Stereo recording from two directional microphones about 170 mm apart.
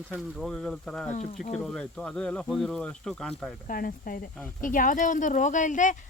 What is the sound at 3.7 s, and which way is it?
Speech, 55° left (ahead or behind).